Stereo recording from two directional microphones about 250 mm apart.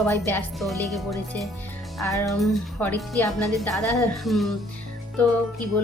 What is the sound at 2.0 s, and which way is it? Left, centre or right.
Speech, centre.